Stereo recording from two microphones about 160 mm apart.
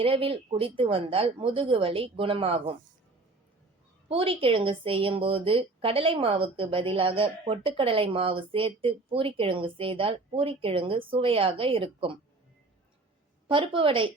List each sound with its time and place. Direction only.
0.0 s a woman's voice: 35° right (ahead or behind)
4.1 s a woman's voice: 35° right (ahead or behind)
13.5 s a woman's voice: 35° right (ahead or behind)